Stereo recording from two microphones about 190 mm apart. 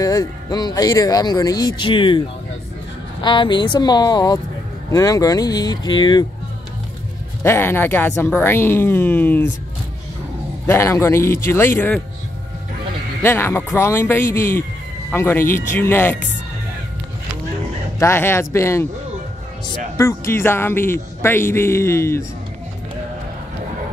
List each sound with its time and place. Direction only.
0.0 s speech: 20° left (ahead or behind)
7.4 s speech: 10° left (ahead or behind)
10.7 s speech: 15° left (ahead or behind)
13.2 s speech: 10° left (ahead or behind)
17.9 s speech: 15° left (ahead or behind)